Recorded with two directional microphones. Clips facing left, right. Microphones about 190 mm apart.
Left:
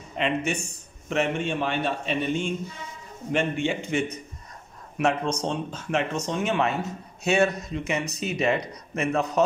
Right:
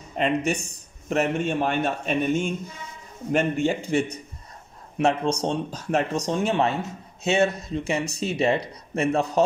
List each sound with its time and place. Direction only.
0.2 s a man's voice: 35° right (ahead or behind)